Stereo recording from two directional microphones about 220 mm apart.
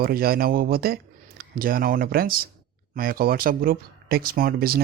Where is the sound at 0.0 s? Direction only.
45° right (ahead or behind).